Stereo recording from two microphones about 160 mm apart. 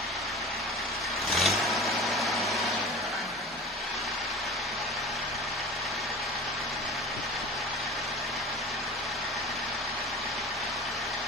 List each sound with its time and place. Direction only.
1.3 s vehicle: centre (ahead or behind)